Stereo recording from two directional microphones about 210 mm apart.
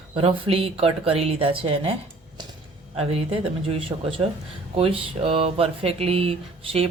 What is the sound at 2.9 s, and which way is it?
Speech, 25° right (ahead or behind).